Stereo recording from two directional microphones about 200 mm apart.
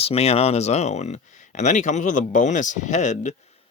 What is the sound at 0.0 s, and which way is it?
Speech, 30° left (ahead or behind).